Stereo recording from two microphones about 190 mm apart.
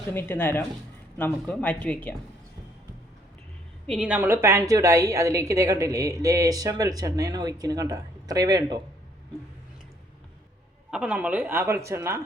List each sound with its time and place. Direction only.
0.1 s speech: 10° left (ahead or behind)
3.8 s a woman's voice: 5° right (ahead or behind); by 8.8 s 20° right (ahead or behind)
10.9 s a woman's voice: 5° right (ahead or behind)